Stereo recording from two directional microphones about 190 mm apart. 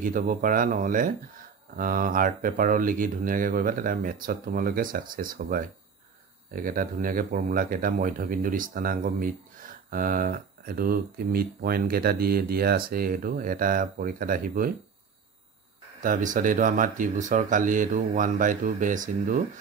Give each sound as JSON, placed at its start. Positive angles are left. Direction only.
{"t": 0.0, "sound": "speech", "side_deg": -45}
{"t": 16.0, "sound": "speech", "side_deg": -45}